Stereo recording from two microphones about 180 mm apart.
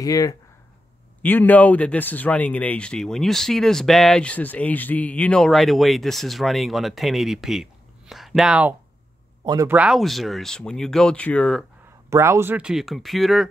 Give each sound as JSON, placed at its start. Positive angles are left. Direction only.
{"t": 0.0, "sound": "speech", "side_deg": 20}
{"t": 9.4, "sound": "speech", "side_deg": -25}
{"t": 9.7, "sound": "speech", "side_deg": -5}
{"t": 12.1, "sound": "speech", "side_deg": -15}